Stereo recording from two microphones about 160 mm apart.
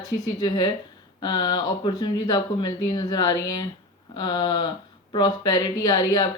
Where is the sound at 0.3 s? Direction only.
25° left (ahead or behind).